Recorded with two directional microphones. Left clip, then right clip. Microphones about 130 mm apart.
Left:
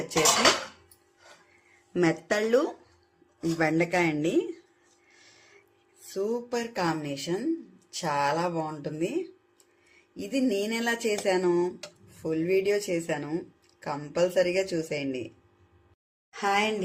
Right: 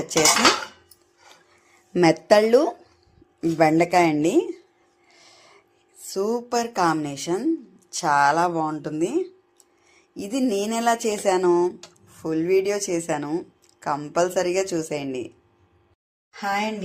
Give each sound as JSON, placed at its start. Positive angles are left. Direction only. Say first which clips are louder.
{"t": 2.0, "sound": "a woman's voice", "louder": "right 9 dB", "side_deg": -35}
{"t": 6.1, "sound": "a woman's voice", "louder": "right 5 dB", "side_deg": -25}
{"t": 16.3, "sound": "a woman's voice", "louder": "right 1 dB", "side_deg": 15}